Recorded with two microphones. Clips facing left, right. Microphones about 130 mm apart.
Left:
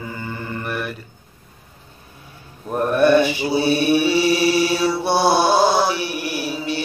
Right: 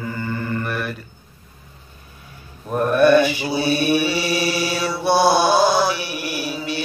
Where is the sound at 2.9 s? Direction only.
25° left (ahead or behind).